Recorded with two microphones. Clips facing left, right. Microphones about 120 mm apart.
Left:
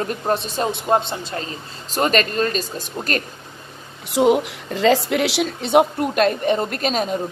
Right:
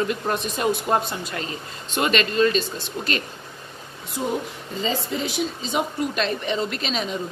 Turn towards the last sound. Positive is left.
turn(degrees=45)  # may be behind; listen again after turning